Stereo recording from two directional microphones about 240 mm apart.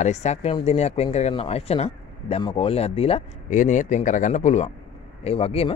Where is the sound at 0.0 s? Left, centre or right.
Left.